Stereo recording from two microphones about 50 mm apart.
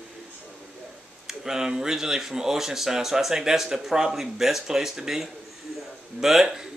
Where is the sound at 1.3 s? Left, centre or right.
Centre.